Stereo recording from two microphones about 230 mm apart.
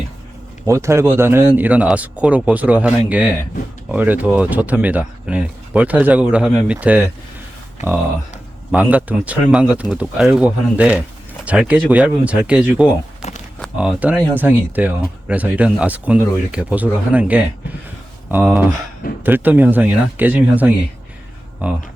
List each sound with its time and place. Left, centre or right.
0.6 s speech: centre
7.8 s speech: left
8.7 s speech: centre
13.2 s a sound: left
13.6 s speech: centre